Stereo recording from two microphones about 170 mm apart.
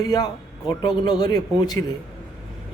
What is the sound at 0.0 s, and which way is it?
A man's voice, 20° left (ahead or behind).